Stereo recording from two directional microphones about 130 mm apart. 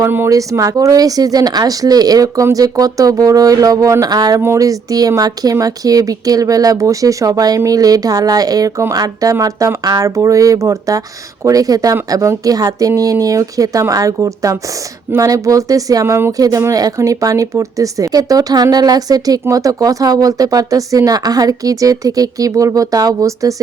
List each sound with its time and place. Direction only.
0.0 s speech: 20° right (ahead or behind)